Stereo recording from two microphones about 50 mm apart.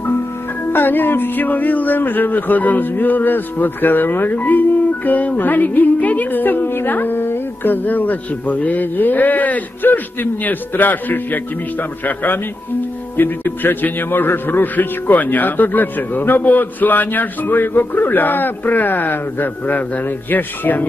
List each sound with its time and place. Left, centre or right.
0.7 s speech: left